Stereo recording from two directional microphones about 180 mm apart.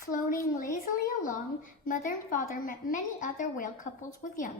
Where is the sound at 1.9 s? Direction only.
50° left (ahead or behind).